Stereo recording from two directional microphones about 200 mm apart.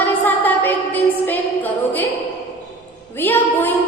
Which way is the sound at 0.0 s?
10° left (ahead or behind).